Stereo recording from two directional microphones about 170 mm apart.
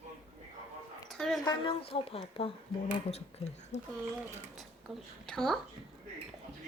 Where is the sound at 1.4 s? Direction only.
25° left (ahead or behind).